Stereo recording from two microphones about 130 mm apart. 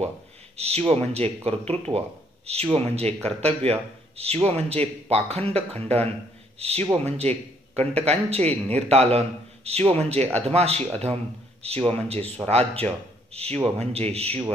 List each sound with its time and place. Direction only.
0.6 s speech: 50° right (ahead or behind)